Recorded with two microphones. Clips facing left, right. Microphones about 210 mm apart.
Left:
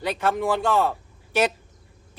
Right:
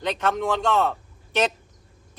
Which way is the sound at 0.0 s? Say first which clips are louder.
Left 1 dB; 10° left (ahead or behind).